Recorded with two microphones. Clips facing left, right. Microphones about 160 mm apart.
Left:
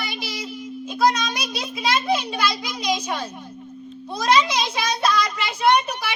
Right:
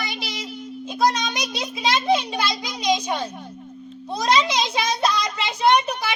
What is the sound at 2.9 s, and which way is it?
Speech, 20° right (ahead or behind).